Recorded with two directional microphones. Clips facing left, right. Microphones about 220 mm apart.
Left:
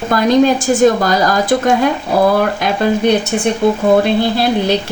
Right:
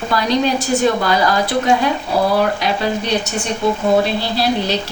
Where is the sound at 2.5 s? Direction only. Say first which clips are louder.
Left 4 dB; 50° left (ahead or behind).